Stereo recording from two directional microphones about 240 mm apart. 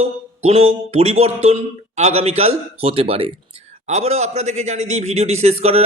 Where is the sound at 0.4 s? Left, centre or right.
Right.